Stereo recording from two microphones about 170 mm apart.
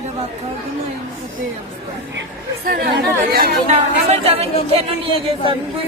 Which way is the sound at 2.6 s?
60° right (ahead or behind).